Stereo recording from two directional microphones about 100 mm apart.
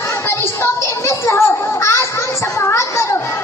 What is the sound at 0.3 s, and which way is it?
Children playing, 25° left (ahead or behind).